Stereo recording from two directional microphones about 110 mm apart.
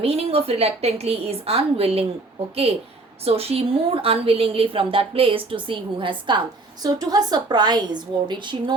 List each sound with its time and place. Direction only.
0.0 s a woman's voice: 60° right (ahead or behind)
3.2 s a woman's voice: 65° right (ahead or behind); by 6.4 s 45° right (ahead or behind)
6.8 s a woman's voice: 35° right (ahead or behind)